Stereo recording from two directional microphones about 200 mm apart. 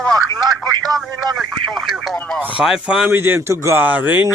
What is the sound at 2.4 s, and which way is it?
Speech, 5° right (ahead or behind).